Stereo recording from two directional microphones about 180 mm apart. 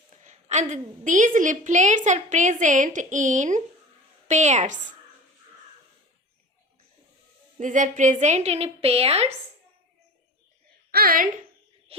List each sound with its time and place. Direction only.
0.1 s a woman's voice: 40° right (ahead or behind)
7.6 s a woman's voice: 45° right (ahead or behind)
10.9 s a woman's voice: 55° right (ahead or behind)
11.9 s a sound: 35° right (ahead or behind)